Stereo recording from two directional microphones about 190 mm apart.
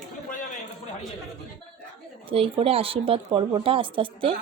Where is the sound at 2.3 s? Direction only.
30° right (ahead or behind).